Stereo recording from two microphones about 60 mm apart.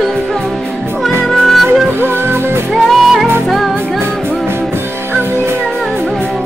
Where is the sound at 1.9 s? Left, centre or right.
Right.